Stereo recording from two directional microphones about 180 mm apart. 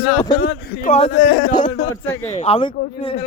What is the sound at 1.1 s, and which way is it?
Speech, 60° left (ahead or behind).